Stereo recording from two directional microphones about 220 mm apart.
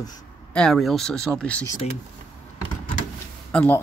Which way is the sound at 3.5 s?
5° left (ahead or behind).